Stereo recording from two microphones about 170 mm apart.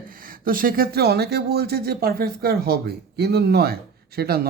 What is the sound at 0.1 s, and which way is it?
Speech, 55° right (ahead or behind).